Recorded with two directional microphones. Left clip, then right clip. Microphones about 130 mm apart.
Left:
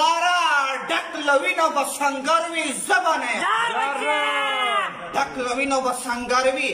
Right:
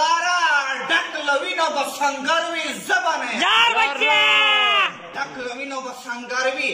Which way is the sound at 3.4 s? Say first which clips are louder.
Right 5 dB; 15° right (ahead or behind).